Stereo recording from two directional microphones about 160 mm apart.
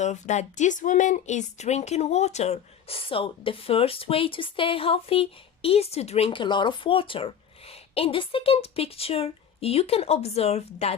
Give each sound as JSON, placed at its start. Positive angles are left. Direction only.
{"t": 0.0, "sound": "a woman's voice", "side_deg": 45}